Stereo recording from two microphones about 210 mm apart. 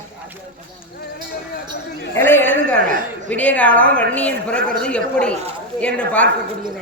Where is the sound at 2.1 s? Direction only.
10° left (ahead or behind).